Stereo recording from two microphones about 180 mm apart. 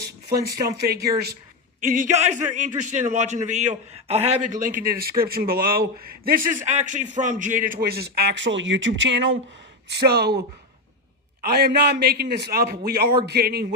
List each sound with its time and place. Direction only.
0.5 s a man's voice: 60° right (ahead or behind)
1.8 s a man's voice: 45° right (ahead or behind); by 9.4 s 85° right
9.9 s a man's voice: 65° right (ahead or behind)
11.5 s a man's voice: 65° right (ahead or behind)